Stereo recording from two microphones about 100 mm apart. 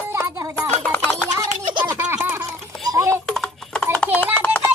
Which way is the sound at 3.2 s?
5° left (ahead or behind).